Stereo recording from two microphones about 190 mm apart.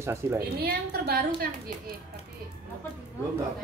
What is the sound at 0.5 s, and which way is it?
Speech, 55° right (ahead or behind).